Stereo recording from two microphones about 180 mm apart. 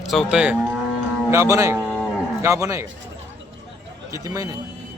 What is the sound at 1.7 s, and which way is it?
Cattle, centre (ahead or behind).